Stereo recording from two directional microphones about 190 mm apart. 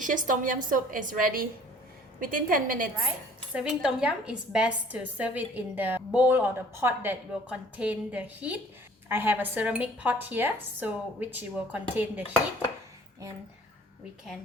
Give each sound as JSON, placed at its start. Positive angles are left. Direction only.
{"t": 0.0, "sound": "a woman's voice", "side_deg": -45}
{"t": 3.5, "sound": "a woman's voice", "side_deg": -5}